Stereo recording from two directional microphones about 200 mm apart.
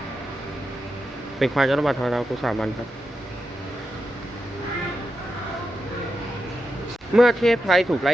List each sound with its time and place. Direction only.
1.4 s speech: centre (ahead or behind)
7.2 s speech: centre (ahead or behind)